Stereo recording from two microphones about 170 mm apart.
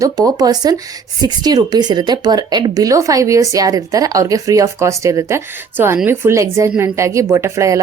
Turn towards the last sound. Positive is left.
turn(degrees=-20)  # may be behind; listen again after turning